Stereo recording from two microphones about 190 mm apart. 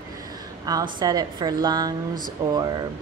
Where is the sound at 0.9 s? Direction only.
20° right (ahead or behind).